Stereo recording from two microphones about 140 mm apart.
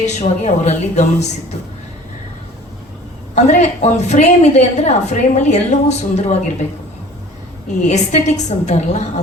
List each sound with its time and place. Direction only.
0.0 s a woman's voice: 55° left (ahead or behind)
3.3 s a woman's voice: 55° left (ahead or behind)
7.9 s a woman's voice: 55° left (ahead or behind)